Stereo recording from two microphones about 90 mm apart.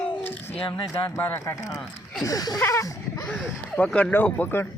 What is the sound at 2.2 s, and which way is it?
Speech, 40° left (ahead or behind).